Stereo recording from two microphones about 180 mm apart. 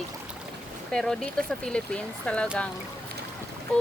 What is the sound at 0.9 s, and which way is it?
Speech, 5° left (ahead or behind).